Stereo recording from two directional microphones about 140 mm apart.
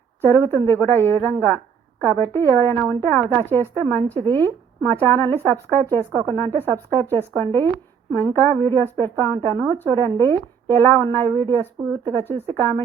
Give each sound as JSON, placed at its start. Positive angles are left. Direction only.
{"t": 0.2, "sound": "a woman's voice", "side_deg": 15}